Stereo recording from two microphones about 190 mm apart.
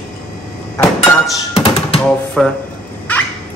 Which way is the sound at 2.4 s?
5° left (ahead or behind).